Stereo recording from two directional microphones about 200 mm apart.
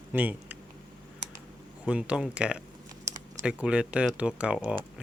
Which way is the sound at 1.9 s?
5° right (ahead or behind).